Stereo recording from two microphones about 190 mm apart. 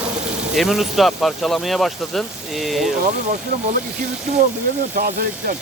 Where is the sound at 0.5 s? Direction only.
Centre (ahead or behind).